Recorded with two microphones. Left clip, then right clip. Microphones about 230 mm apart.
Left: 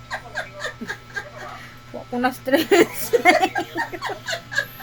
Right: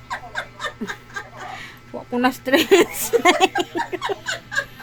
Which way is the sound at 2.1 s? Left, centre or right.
Right.